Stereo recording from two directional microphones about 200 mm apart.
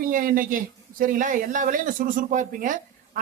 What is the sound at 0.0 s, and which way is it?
A man's voice, 45° right (ahead or behind).